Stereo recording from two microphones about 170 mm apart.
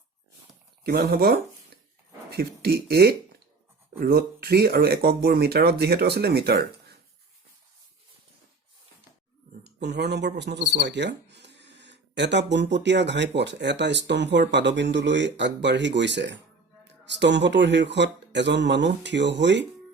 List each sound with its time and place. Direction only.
0.9 s speech: 70° right (ahead or behind)
9.6 s speech: 80° right